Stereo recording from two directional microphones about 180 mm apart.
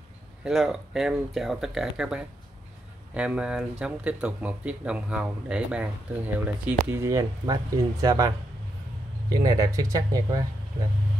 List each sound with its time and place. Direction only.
0.4 s speech: centre (ahead or behind); by 8.3 s 20° right (ahead or behind)
9.3 s speech: 20° right (ahead or behind)